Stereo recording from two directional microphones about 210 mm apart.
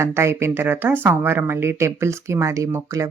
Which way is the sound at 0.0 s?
10° right (ahead or behind).